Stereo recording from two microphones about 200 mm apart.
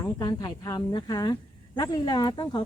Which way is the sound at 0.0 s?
20° left (ahead or behind).